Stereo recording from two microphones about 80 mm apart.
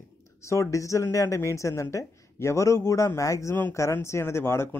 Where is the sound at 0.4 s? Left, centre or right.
Left.